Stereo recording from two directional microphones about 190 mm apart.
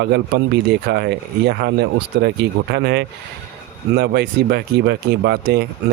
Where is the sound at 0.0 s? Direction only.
60° right (ahead or behind).